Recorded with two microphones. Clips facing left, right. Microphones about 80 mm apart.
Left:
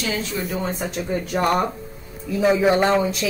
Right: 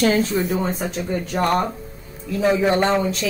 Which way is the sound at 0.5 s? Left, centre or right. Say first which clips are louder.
Right 2 dB; centre.